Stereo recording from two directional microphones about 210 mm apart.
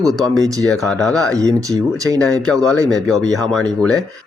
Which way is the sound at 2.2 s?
5° left (ahead or behind).